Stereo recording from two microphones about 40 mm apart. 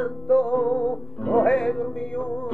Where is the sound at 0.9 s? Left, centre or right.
Centre.